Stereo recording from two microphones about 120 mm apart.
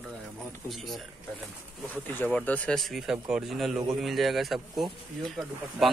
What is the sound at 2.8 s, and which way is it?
Speech, centre (ahead or behind).